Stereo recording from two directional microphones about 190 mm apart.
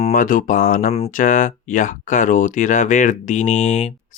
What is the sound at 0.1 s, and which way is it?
Speech, 45° left (ahead or behind).